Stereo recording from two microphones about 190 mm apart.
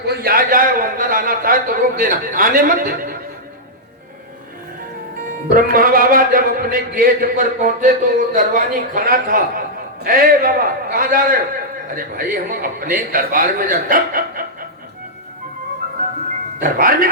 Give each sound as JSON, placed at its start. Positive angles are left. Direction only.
{"t": 0.0, "sound": "a man's voice", "side_deg": -55}
{"t": 5.5, "sound": "a man's voice", "side_deg": -50}
{"t": 16.6, "sound": "a man's voice", "side_deg": -50}